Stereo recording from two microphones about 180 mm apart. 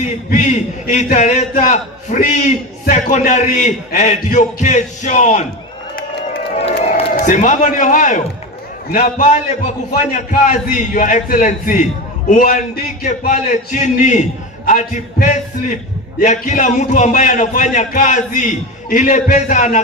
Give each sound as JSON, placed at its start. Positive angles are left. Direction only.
{"t": 0.8, "sound": "a man's voice", "side_deg": 50}
{"t": 6.6, "sound": "crowd", "side_deg": 35}
{"t": 7.2, "sound": "a man's voice", "side_deg": 45}